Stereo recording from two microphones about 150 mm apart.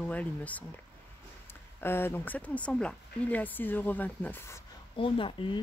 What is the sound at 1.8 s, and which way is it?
Speech, 15° left (ahead or behind).